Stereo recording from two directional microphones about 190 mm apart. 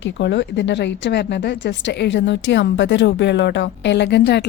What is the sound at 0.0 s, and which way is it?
Speech, 70° left (ahead or behind).